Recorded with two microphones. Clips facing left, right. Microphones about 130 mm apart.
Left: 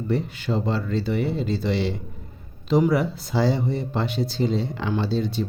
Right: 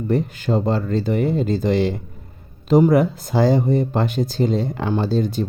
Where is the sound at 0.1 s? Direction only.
45° right (ahead or behind).